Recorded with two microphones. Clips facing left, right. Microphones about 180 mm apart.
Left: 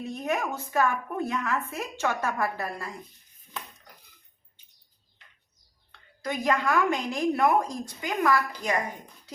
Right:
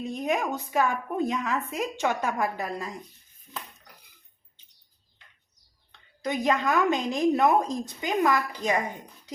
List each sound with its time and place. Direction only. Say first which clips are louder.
0.0 s a woman's voice: right 2 dB; 15° right (ahead or behind)
6.2 s a woman's voice: right 1 dB; 20° right (ahead or behind)